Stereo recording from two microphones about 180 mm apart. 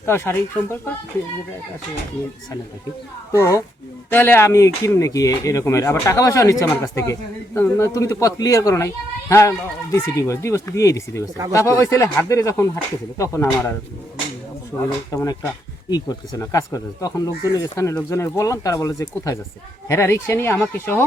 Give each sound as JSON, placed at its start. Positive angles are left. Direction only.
{"t": 0.0, "sound": "speech", "side_deg": 15}
{"t": 3.3, "sound": "speech", "side_deg": 15}
{"t": 14.7, "sound": "speech", "side_deg": 10}